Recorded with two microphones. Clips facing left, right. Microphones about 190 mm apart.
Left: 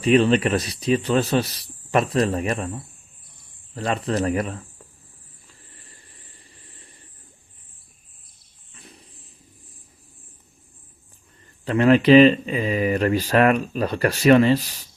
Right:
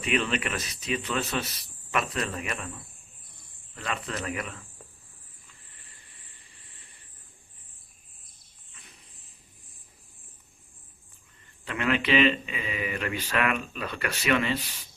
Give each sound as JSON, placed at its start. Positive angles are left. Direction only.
{"t": 0.0, "sound": "speech", "side_deg": 35}
{"t": 5.5, "sound": "a sound", "side_deg": 40}
{"t": 11.6, "sound": "speech", "side_deg": 35}